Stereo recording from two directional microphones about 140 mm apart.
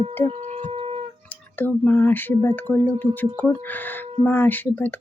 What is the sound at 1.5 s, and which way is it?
Speech, 15° left (ahead or behind).